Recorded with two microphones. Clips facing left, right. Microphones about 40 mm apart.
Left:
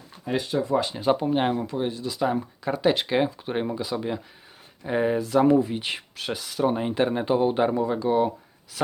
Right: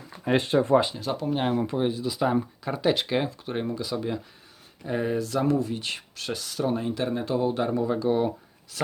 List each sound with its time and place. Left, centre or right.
0.3 s speech: right
0.9 s speech: left
1.8 s speech: centre
6.7 s speech: left
7.9 s speech: centre